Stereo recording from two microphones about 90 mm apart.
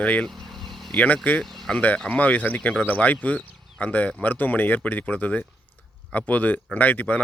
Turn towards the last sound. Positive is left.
turn(degrees=20)  # may be behind; listen again after turning